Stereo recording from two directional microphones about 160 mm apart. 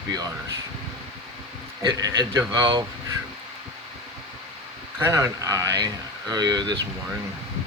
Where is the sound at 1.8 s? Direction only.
25° right (ahead or behind).